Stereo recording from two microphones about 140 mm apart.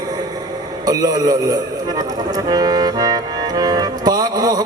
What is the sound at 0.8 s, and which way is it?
Music, 25° right (ahead or behind).